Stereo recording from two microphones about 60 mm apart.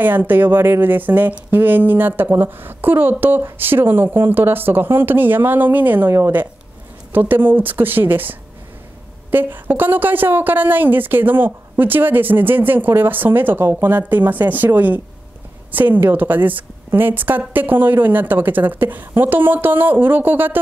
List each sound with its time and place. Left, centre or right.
0.0 s speech: right